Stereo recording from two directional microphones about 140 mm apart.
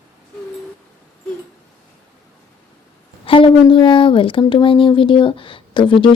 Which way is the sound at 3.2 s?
40° left (ahead or behind).